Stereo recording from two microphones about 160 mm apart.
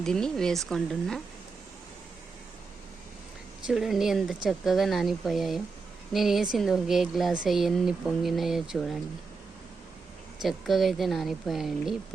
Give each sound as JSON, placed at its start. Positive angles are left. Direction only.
{"t": 0.0, "sound": "speech", "side_deg": 5}
{"t": 3.7, "sound": "speech", "side_deg": 0}
{"t": 10.4, "sound": "speech", "side_deg": 0}